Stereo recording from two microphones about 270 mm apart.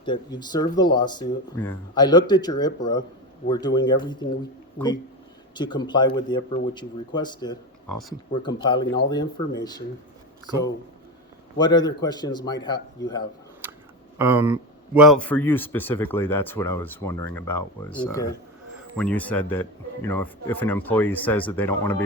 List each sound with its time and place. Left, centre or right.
0.0 s a man's voice: centre
5.5 s a man's voice: centre
11.5 s a man's voice: centre
14.2 s a man's voice: centre